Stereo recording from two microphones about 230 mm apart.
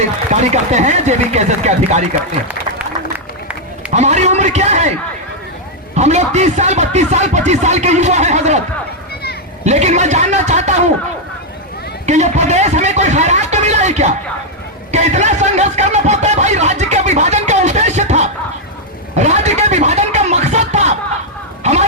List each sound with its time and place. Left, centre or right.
0.3 s speech: right
3.9 s speech: right
6.0 s speech: right
9.6 s speech: right
12.0 s speech: right
19.1 s a sound: right